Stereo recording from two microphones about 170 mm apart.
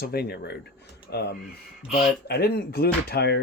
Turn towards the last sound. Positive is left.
turn(degrees=70)  # may be behind; listen again after turning